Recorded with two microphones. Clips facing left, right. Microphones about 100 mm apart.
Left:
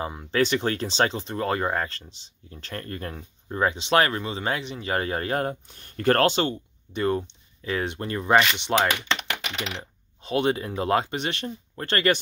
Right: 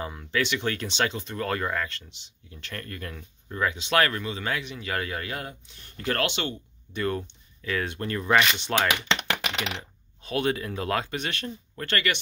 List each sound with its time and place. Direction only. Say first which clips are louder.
0.0 s speech: left 4 dB; 25° left (ahead or behind)
6.9 s speech: left 4 dB; 25° left (ahead or behind)
10.2 s speech: left 3 dB; 25° left (ahead or behind)